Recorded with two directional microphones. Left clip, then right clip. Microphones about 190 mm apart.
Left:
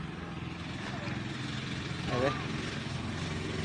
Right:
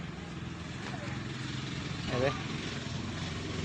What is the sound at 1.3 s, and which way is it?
Vehicle, 65° left (ahead or behind).